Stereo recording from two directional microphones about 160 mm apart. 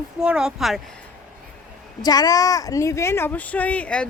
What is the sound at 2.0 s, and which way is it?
A woman's voice, 25° left (ahead or behind).